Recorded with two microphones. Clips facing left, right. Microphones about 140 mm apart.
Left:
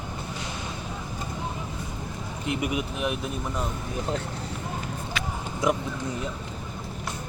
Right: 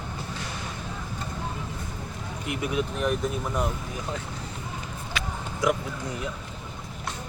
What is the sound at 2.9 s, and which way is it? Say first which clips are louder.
Speech: right 2 dB; 5° left (ahead or behind).